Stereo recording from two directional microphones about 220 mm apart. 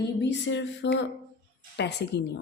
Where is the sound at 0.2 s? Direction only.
55° left (ahead or behind).